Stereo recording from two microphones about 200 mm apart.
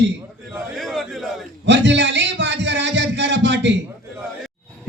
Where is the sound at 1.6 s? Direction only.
60° right (ahead or behind).